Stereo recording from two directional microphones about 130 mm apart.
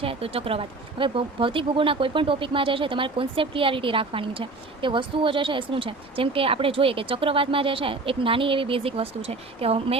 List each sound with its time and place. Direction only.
0.0 s speech: 45° right (ahead or behind)